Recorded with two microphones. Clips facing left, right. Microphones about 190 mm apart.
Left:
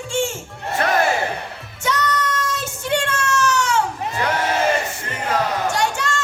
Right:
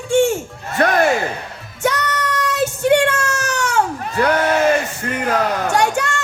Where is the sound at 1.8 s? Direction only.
65° right (ahead or behind).